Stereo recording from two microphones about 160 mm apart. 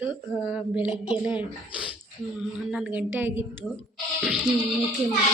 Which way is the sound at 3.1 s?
15° right (ahead or behind).